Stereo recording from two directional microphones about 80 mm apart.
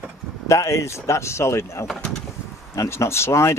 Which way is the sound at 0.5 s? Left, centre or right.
Left.